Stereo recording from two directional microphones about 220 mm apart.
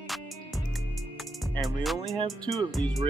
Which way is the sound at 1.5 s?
Centre (ahead or behind).